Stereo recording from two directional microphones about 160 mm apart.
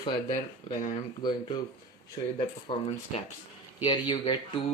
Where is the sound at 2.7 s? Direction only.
35° left (ahead or behind).